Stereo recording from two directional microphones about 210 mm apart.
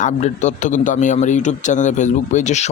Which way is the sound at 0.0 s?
35° left (ahead or behind).